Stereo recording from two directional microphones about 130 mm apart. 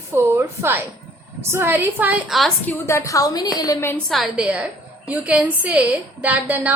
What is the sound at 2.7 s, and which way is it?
A woman's voice, 20° left (ahead or behind).